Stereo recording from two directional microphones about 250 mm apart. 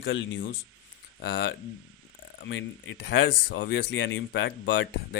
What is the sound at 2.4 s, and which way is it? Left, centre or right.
Speech, left.